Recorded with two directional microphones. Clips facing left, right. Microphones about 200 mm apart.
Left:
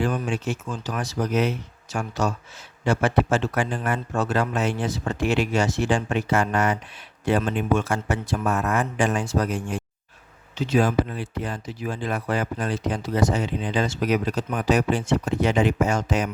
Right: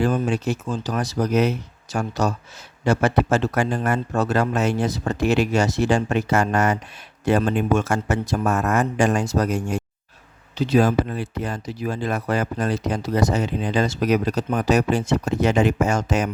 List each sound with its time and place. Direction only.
0.0 s speech: 35° right (ahead or behind)